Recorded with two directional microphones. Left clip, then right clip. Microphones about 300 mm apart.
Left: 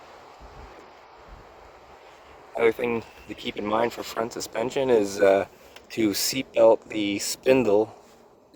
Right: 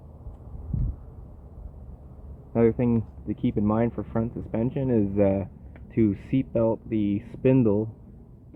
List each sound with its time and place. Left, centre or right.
2.6 s speech: centre